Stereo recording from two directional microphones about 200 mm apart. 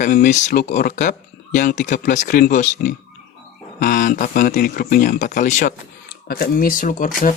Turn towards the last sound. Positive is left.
turn(degrees=40)  # may be behind; listen again after turning